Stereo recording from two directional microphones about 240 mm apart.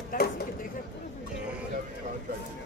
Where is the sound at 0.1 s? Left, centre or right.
Left.